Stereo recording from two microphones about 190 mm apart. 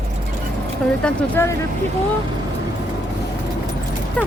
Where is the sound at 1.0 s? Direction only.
10° left (ahead or behind).